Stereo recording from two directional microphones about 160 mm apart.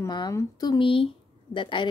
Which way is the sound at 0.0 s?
25° left (ahead or behind).